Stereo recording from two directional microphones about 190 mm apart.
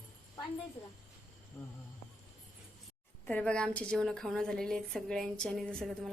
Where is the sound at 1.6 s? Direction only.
15° left (ahead or behind).